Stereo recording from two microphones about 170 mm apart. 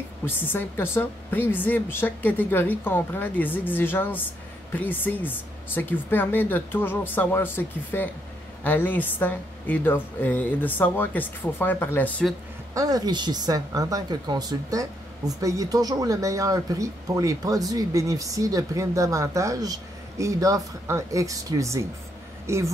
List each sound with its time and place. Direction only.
0.2 s a woman's voice: 10° left (ahead or behind)
12.7 s speech: 20° right (ahead or behind)